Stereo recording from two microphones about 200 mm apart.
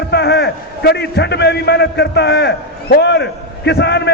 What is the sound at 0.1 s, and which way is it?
A man's voice, 55° left (ahead or behind).